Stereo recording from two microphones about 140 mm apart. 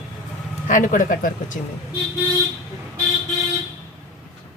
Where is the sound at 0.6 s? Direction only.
65° left (ahead or behind).